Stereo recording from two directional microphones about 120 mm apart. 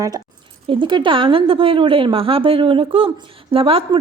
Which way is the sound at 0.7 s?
40° right (ahead or behind).